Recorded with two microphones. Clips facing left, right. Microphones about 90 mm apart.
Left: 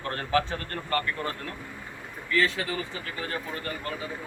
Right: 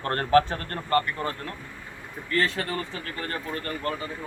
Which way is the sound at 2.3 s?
50° right (ahead or behind).